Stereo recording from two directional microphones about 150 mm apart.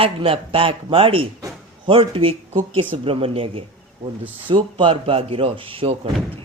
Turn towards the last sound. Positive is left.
turn(degrees=-35)  # may be behind; listen again after turning